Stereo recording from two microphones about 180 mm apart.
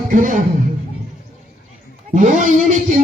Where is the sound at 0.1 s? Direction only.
45° right (ahead or behind).